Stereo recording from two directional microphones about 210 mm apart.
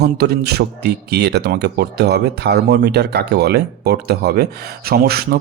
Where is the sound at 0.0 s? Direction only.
50° right (ahead or behind).